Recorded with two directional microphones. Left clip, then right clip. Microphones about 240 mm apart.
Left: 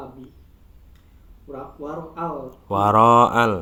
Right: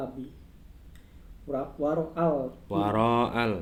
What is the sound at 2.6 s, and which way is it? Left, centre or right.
Speech, left.